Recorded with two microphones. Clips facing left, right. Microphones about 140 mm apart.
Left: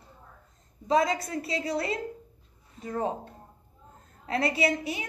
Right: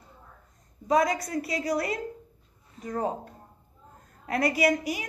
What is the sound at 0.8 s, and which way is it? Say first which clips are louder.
A woman's voice: right 1 dB; 25° left (ahead or behind).